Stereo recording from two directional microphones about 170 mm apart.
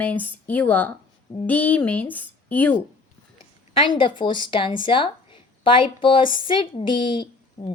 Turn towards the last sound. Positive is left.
turn(degrees=30)  # may be behind; listen again after turning